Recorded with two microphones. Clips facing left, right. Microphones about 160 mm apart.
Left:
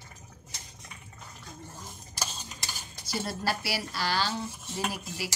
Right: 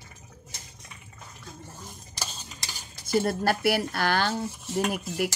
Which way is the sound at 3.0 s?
50° right (ahead or behind).